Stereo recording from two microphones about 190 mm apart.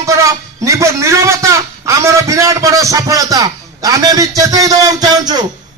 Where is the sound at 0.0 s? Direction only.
15° right (ahead or behind).